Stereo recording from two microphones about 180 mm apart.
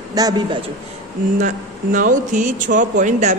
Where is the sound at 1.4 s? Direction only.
45° right (ahead or behind).